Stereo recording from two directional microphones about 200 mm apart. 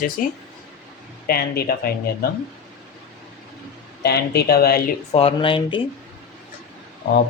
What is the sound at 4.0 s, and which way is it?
Speech, 50° left (ahead or behind).